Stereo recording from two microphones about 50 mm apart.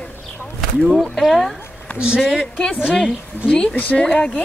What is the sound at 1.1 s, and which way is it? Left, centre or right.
Speech, centre.